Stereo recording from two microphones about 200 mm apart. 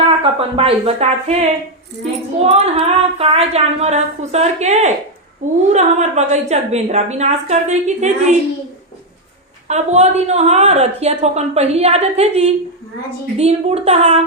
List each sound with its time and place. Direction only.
0.2 s speech: 30° right (ahead or behind)
2.5 s a woman's voice: 30° right (ahead or behind)
9.6 s a woman's voice: 35° right (ahead or behind)